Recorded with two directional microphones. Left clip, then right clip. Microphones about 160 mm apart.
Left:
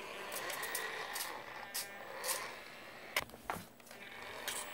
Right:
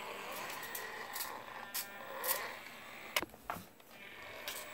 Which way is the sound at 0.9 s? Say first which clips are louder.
Left 2 dB; 15° left (ahead or behind).